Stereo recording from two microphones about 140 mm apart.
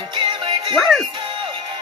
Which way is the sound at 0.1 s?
35° right (ahead or behind).